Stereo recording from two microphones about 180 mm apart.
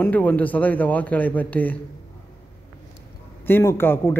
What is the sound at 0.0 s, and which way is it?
Speech, 10° left (ahead or behind).